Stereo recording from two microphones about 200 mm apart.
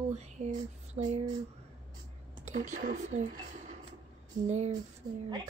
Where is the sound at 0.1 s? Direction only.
35° right (ahead or behind).